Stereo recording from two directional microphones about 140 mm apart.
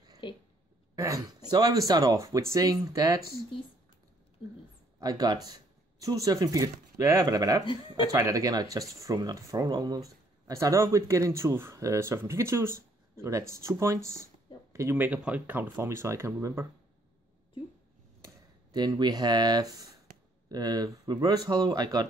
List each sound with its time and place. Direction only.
0.2 s speech: 35° left (ahead or behind)
0.9 s speech: 25° right (ahead or behind)
5.0 s speech: 25° right (ahead or behind)
18.2 s speech: 30° right (ahead or behind)